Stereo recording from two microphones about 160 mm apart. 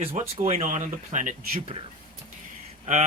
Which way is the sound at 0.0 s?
35° right (ahead or behind).